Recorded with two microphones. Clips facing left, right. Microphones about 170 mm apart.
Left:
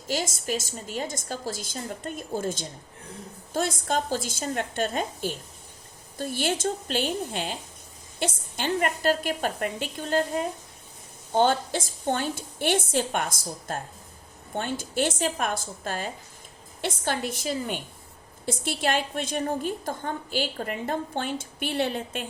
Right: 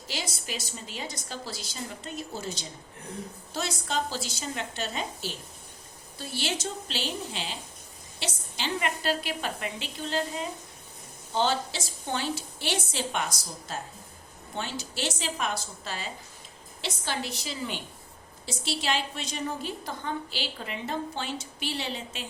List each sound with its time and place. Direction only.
0.1 s a woman's voice: 45° left (ahead or behind)